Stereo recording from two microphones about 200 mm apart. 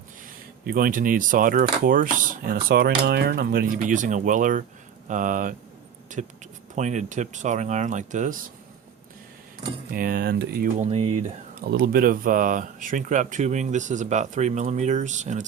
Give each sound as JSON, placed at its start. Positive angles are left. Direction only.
{"t": 0.6, "sound": "speech", "side_deg": -45}
{"t": 9.9, "sound": "speech", "side_deg": -45}
{"t": 10.8, "sound": "speech", "side_deg": -30}
{"t": 11.6, "sound": "speech", "side_deg": -50}